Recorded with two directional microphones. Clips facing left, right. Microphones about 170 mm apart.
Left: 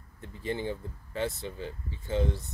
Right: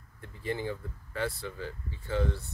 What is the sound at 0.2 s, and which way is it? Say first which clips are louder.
Speech: left 1 dB; 20° left (ahead or behind).